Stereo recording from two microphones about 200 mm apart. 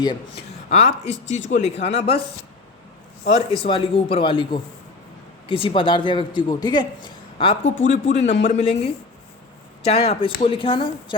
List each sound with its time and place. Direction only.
0.0 s speech: 25° left (ahead or behind)
1.3 s speech: 70° left (ahead or behind)
1.5 s speech: 30° left (ahead or behind)
3.2 s speech: 30° left (ahead or behind)